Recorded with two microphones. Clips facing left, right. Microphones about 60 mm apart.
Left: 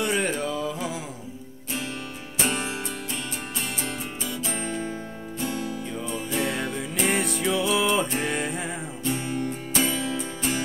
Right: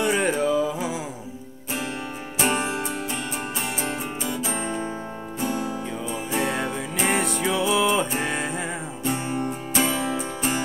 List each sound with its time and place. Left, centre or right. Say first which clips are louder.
0.0 s music: right 4 dB; centre
2.4 s music: right 4 dB; right
3.8 s music: right 4 dB; right
7.1 s music: right 2 dB; centre
7.4 s music: right 2 dB; centre
9.0 s music: right 2 dB; right